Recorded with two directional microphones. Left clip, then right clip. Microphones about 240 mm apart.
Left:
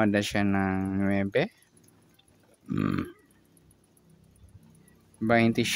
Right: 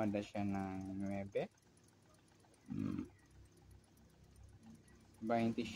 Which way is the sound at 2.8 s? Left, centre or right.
Left.